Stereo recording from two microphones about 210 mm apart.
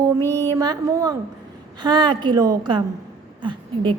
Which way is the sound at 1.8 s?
20° right (ahead or behind).